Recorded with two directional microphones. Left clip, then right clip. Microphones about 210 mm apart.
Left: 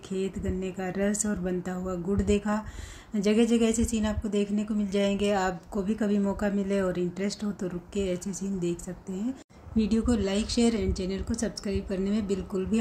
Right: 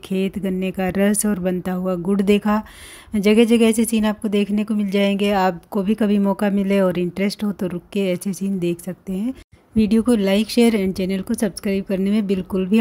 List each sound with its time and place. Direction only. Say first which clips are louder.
0.1 s a woman's voice: right 8 dB; 45° right (ahead or behind)